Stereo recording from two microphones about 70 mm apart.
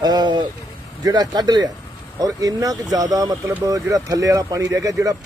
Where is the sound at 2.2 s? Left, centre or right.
Right.